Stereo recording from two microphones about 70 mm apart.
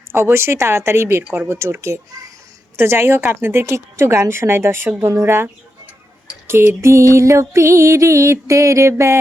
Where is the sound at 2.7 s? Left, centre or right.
Right.